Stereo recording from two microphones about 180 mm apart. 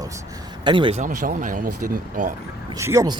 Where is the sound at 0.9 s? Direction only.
45° right (ahead or behind).